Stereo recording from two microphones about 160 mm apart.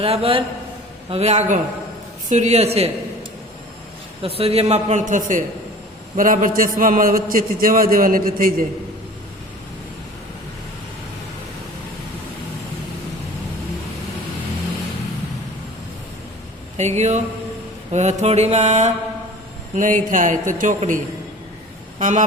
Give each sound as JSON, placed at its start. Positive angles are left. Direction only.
{"t": 0.0, "sound": "a man's voice", "side_deg": -35}
{"t": 4.2, "sound": "a man's voice", "side_deg": -35}
{"t": 16.7, "sound": "speech", "side_deg": -45}
{"t": 19.7, "sound": "speech", "side_deg": -55}
{"t": 21.9, "sound": "vehicle", "side_deg": -50}